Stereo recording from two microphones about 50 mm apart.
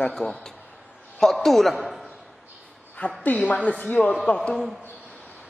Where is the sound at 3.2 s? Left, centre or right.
Left.